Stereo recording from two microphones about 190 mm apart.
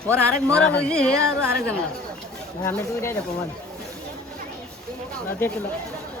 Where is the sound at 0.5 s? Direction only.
5° left (ahead or behind).